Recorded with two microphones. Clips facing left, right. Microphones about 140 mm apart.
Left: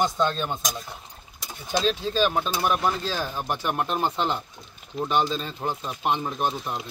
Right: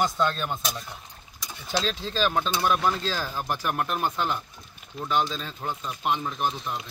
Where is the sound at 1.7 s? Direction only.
15° left (ahead or behind); by 6.8 s 30° left (ahead or behind).